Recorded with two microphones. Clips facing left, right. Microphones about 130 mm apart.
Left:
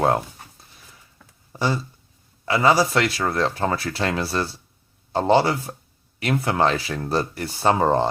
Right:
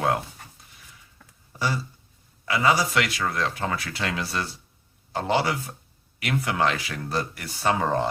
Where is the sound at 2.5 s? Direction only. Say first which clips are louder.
Left 4 dB; 30° left (ahead or behind).